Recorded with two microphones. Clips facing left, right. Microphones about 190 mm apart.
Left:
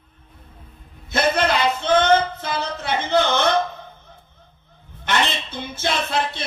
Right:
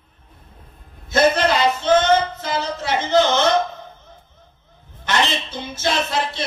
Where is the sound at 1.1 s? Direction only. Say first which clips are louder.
Right 3 dB; 55° left (ahead or behind).